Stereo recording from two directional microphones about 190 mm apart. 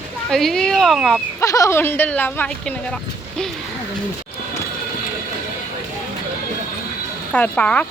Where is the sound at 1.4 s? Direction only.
15° left (ahead or behind).